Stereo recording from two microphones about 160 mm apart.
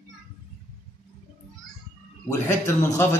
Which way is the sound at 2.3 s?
20° left (ahead or behind).